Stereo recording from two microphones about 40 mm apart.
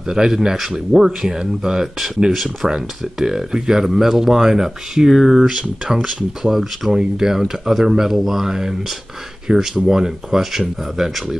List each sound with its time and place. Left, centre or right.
0.0 s speech: centre
6.5 s speech: centre
6.9 s speech: centre